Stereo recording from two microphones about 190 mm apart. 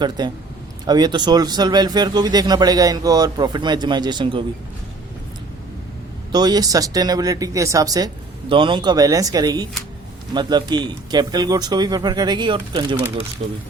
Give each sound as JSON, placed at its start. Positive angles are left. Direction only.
{"t": 0.2, "sound": "a man's voice", "side_deg": -20}
{"t": 6.3, "sound": "a man's voice", "side_deg": -20}